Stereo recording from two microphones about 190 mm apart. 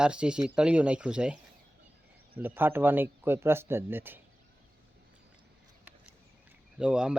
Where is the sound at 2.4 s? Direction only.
10° right (ahead or behind).